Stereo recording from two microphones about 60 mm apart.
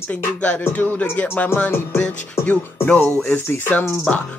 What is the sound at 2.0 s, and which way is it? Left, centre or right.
Speech, left.